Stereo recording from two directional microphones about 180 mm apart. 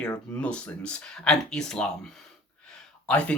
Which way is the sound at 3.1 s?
5° left (ahead or behind).